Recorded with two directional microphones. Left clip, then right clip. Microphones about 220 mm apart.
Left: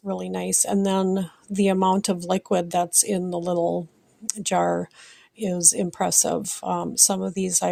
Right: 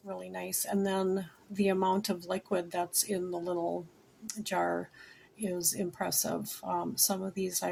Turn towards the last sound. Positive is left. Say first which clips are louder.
# left 10 dB
turn(degrees=40)  # may be behind; listen again after turning